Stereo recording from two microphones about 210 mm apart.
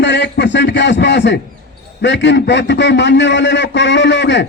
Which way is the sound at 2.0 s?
55° left (ahead or behind).